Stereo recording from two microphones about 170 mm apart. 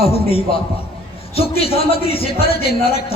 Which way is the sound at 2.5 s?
65° left (ahead or behind).